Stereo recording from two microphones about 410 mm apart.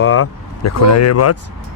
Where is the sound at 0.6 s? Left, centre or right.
Left.